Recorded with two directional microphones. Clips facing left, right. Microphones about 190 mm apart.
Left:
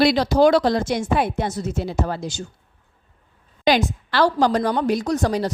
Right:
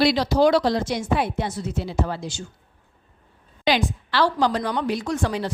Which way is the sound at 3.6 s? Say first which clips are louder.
Left 3 dB; 45° left (ahead or behind).